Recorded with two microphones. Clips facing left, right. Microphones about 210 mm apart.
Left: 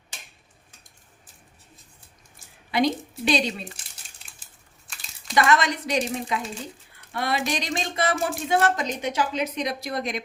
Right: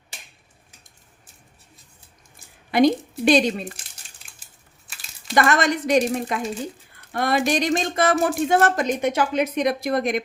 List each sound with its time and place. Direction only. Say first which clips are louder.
2.7 s speech: right 6 dB; 50° right (ahead or behind)
5.3 s speech: right 2 dB; 50° right (ahead or behind)